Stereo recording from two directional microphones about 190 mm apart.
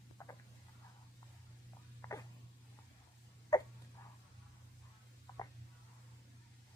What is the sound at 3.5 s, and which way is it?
Hiccup, 20° left (ahead or behind).